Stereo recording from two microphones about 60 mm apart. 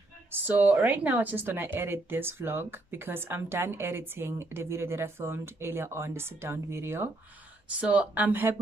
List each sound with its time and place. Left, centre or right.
0.3 s speech: right
7.8 s speech: right